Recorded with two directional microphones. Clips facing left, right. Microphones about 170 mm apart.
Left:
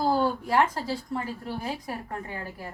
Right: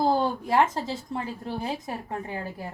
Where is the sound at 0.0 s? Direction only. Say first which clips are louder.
Right 1 dB; 25° right (ahead or behind).